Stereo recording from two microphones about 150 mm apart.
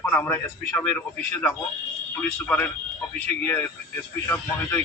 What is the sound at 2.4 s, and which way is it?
Speech, 10° left (ahead or behind).